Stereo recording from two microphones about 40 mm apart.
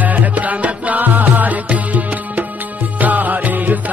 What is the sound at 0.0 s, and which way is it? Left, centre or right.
Music, right.